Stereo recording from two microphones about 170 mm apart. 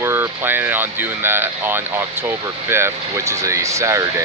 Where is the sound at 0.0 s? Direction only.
15° right (ahead or behind).